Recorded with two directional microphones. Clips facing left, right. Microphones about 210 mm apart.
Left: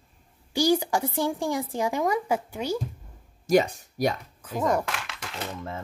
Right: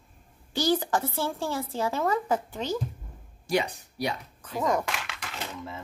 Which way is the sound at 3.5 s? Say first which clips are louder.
Left 6 dB; 45° left (ahead or behind).